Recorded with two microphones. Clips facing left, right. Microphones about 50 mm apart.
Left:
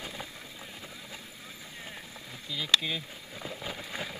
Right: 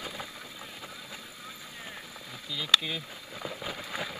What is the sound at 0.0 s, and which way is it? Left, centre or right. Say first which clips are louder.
Vehicle: right 1 dB; centre.